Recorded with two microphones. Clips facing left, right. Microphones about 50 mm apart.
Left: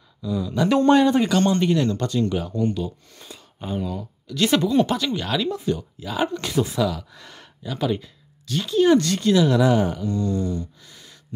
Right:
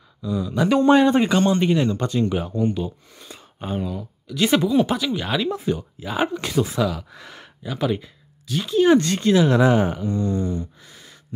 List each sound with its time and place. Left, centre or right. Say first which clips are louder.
0.2 s speech: right 1 dB; centre
1.0 s speech: right 1 dB; centre
3.3 s a sound: right 1 dB; right
3.8 s speech: even; centre